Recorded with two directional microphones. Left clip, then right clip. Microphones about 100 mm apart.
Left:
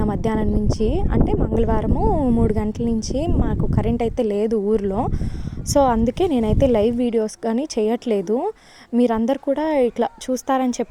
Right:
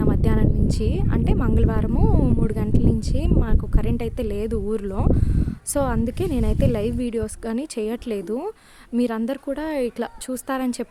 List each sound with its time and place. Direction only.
0.0 s music: 35° left (ahead or behind)
0.9 s a woman's voice: 35° left (ahead or behind)
2.0 s speech: 20° left (ahead or behind)
2.5 s a woman's voice: 35° left (ahead or behind)